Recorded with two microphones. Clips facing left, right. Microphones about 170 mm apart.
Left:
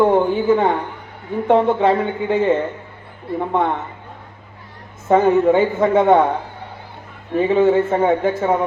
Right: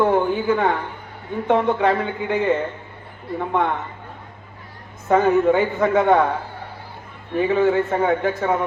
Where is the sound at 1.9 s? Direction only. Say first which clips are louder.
Left 3 dB; 25° left (ahead or behind).